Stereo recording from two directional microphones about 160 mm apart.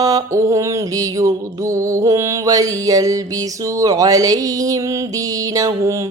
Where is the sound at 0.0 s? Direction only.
20° right (ahead or behind).